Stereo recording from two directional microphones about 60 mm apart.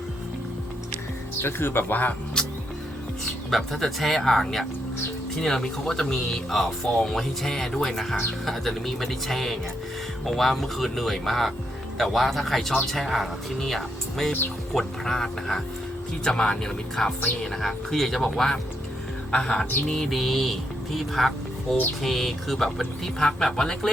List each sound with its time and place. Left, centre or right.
1.4 s speech: left
2.4 s music: centre
3.5 s speech: centre